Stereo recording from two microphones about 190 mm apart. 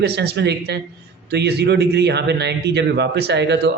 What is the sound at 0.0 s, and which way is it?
A man's voice, 60° right (ahead or behind).